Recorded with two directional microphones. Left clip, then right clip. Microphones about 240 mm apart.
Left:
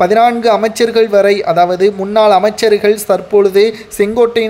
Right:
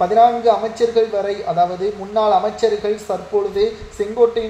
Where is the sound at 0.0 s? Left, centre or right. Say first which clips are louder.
Left 4 dB; left.